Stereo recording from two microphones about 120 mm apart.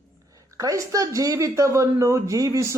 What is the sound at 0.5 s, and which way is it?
Speech, 25° right (ahead or behind).